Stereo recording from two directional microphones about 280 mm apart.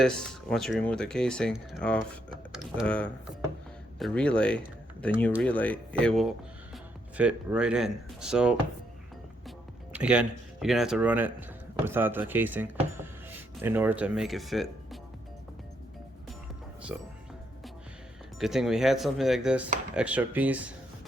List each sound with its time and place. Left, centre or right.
0.0 s speech: centre
9.9 s speech: centre
16.9 s speech: centre
18.3 s speech: centre